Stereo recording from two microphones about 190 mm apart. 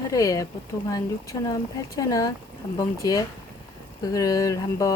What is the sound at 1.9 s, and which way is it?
Speech, 20° left (ahead or behind).